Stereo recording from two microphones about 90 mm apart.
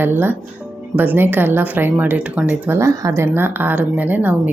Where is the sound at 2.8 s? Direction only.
35° right (ahead or behind).